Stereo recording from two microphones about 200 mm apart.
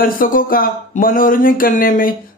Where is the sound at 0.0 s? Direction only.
45° left (ahead or behind).